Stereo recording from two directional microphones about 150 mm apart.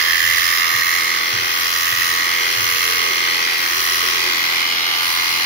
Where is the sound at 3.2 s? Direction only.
85° left.